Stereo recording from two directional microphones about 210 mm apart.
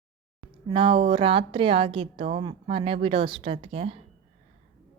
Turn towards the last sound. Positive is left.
turn(degrees=-25)  # may be behind; listen again after turning